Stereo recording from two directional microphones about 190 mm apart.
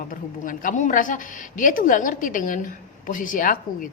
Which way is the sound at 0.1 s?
45° left (ahead or behind).